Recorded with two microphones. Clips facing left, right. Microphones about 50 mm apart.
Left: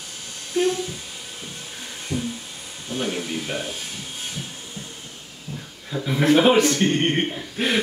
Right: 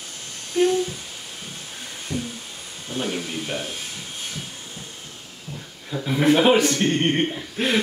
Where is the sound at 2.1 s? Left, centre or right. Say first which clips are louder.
Left 1 dB; left.